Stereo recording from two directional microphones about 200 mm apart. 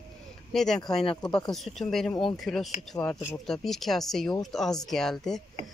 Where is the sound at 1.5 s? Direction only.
Centre (ahead or behind).